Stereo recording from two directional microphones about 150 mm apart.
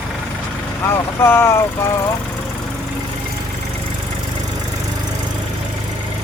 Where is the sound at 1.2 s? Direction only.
15° left (ahead or behind).